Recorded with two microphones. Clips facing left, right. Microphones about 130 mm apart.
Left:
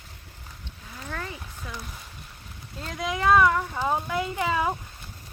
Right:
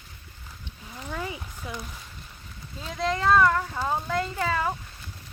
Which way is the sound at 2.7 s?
Centre (ahead or behind).